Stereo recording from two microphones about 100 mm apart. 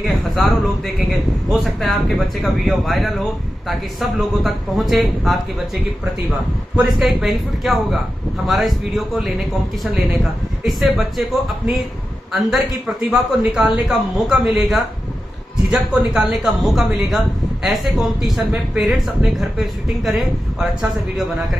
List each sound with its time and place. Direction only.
0.0 s a woman's voice: centre (ahead or behind)
6.9 s a woman's voice: centre (ahead or behind)
12.3 s a woman's voice: centre (ahead or behind)